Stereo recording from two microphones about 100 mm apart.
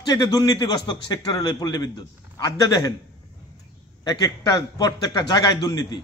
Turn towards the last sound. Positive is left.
turn(degrees=40)  # may be behind; listen again after turning